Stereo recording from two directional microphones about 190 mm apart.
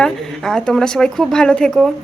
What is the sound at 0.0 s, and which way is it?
A woman's voice, 5° left (ahead or behind).